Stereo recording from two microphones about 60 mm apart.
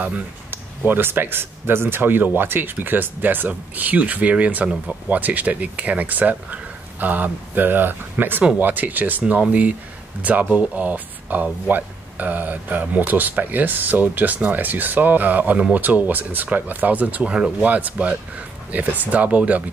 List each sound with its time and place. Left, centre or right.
0.5 s speech: right